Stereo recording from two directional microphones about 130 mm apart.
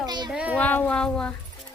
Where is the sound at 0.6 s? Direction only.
10° left (ahead or behind).